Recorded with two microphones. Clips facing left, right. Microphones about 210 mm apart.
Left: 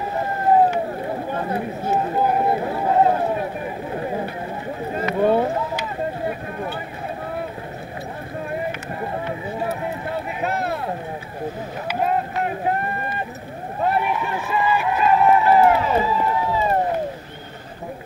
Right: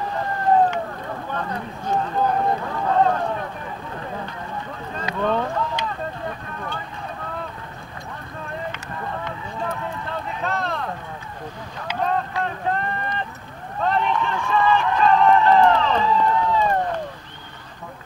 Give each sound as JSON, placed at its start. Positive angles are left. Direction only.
{"t": 0.2, "sound": "run", "side_deg": 10}
{"t": 2.0, "sound": "run", "side_deg": 15}
{"t": 2.9, "sound": "a sound", "side_deg": 10}
{"t": 5.2, "sound": "boat", "side_deg": 10}
{"t": 12.1, "sound": "a sound", "side_deg": 15}
{"t": 13.9, "sound": "run", "side_deg": 10}